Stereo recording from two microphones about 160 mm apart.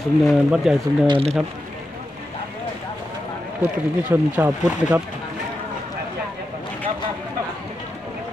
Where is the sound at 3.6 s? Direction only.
10° right (ahead or behind).